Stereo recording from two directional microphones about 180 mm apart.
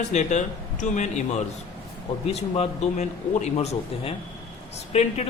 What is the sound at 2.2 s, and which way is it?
A man's voice, 35° left (ahead or behind).